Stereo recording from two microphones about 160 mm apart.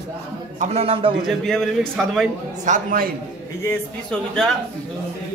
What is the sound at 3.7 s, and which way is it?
Speech, 5° left (ahead or behind).